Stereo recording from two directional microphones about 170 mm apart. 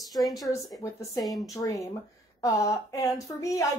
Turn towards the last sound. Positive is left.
turn(degrees=20)  # may be behind; listen again after turning